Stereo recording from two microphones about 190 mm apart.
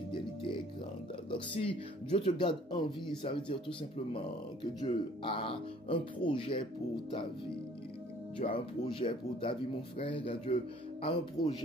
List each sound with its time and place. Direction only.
0.1 s music: 25° left (ahead or behind)
1.3 s speech: 30° left (ahead or behind)
4.8 s speech: 25° left (ahead or behind)
8.5 s speech: 25° left (ahead or behind)